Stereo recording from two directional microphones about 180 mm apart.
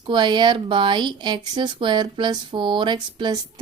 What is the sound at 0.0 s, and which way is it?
Speech, 25° right (ahead or behind).